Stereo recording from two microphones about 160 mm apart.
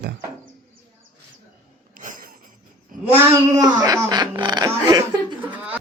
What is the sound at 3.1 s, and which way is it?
Speech, 15° right (ahead or behind).